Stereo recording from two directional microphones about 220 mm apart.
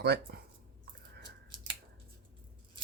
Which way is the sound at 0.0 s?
45° right (ahead or behind).